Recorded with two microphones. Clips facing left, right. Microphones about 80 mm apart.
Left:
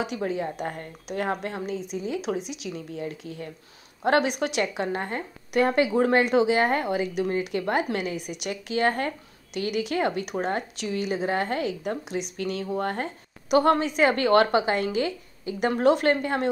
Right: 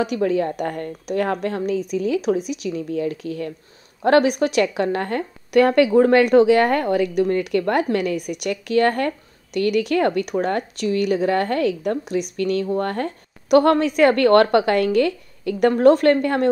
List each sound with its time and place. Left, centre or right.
0.0 s speech: right
2.2 s speech: right
15.7 s a woman's voice: right